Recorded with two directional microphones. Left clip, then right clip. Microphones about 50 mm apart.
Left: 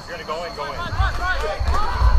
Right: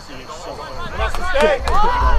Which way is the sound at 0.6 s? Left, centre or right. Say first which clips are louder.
Right 1 dB; centre.